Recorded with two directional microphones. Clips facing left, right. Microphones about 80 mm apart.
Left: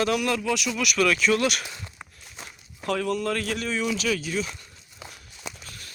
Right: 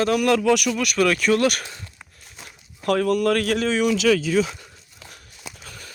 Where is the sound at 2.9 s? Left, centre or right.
Right.